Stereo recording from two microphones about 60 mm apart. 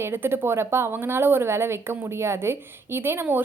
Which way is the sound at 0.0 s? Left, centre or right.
Right.